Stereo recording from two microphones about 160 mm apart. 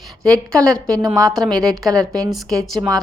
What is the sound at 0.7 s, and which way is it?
Speech, 5° left (ahead or behind).